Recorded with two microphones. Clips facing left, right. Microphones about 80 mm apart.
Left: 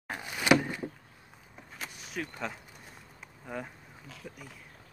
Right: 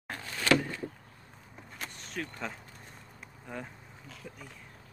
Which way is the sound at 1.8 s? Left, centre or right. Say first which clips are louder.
Left 1 dB; centre.